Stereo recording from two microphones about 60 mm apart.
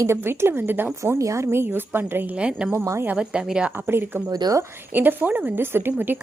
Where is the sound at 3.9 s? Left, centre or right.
Right.